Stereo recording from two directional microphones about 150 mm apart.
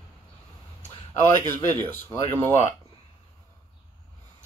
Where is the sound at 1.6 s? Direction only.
15° left (ahead or behind).